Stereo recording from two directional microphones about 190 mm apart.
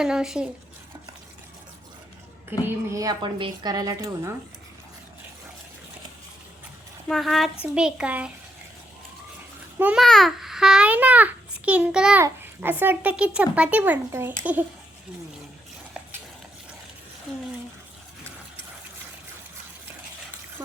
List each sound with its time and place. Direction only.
0.0 s a child's voice: 5° right (ahead or behind)
2.5 s a woman's voice: 15° right (ahead or behind)
7.1 s a child's voice: centre (ahead or behind)
9.7 s a child's voice: 5° right (ahead or behind)